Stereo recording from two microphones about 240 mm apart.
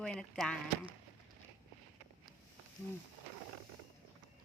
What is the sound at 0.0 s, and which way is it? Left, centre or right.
Speech, centre.